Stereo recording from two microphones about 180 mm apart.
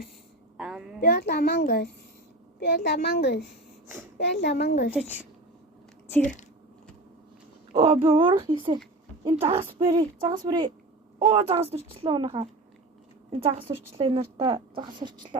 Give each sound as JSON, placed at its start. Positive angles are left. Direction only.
{"t": 0.5, "sound": "a sound", "side_deg": -5}
{"t": 1.0, "sound": "a child's voice", "side_deg": 55}
{"t": 7.7, "sound": "a woman's voice", "side_deg": -30}